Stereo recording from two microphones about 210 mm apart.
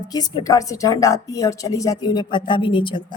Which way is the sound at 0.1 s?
20° left (ahead or behind).